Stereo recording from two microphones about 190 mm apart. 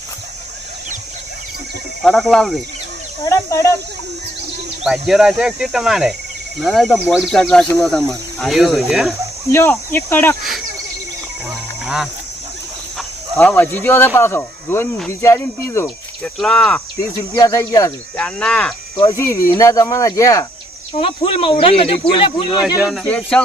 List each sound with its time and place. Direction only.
2.0 s speech: centre (ahead or behind)
3.2 s speech: 15° left (ahead or behind)
4.8 s speech: centre (ahead or behind)
9.5 s speech: 10° left (ahead or behind)
11.4 s a sound: 5° right (ahead or behind)
13.3 s speech: 10° left (ahead or behind)
16.4 s speech: 5° left (ahead or behind)
17.2 s speech: 20° left (ahead or behind)
18.2 s speech: 5° left (ahead or behind)
18.9 s speech: 15° left (ahead or behind)
20.9 s speech: 30° left (ahead or behind)
22.9 s speech: 5° left (ahead or behind)